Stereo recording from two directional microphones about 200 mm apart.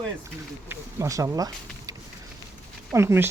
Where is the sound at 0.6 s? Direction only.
15° right (ahead or behind).